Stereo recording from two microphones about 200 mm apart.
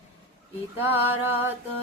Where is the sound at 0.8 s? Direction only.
10° right (ahead or behind).